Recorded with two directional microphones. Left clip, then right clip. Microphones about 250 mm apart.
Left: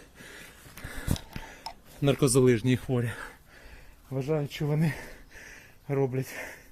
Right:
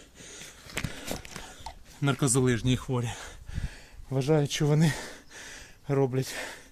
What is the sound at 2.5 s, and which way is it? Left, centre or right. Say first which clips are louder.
Speech: left 2 dB; right.